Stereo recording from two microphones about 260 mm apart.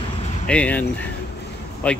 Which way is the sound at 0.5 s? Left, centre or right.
Centre.